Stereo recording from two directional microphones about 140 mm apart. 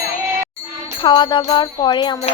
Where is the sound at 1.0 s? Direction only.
35° left (ahead or behind).